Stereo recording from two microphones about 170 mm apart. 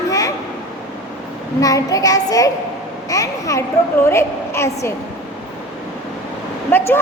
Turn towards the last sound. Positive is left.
turn(degrees=15)  # may be behind; listen again after turning